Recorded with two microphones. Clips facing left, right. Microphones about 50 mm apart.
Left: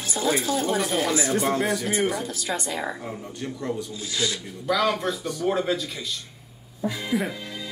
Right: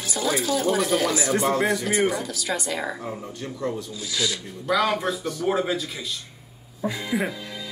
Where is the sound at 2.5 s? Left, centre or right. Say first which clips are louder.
Right 2 dB; left.